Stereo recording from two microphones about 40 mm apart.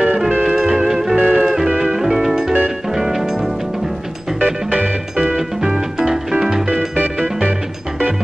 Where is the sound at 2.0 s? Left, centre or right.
Centre.